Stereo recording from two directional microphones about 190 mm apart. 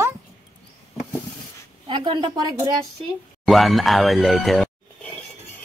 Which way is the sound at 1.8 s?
25° right (ahead or behind).